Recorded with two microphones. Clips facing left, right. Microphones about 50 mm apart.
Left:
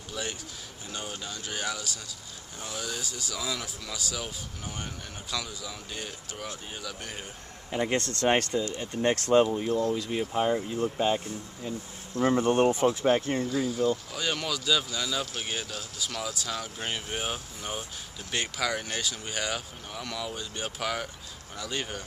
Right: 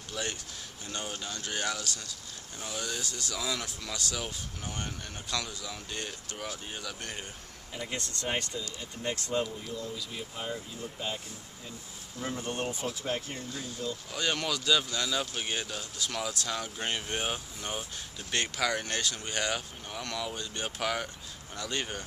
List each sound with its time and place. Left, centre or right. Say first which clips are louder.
0.1 s speech: left 1 dB; centre
7.7 s speech: left 9 dB; left
12.2 s speech: left 12 dB; left
14.1 s speech: even; centre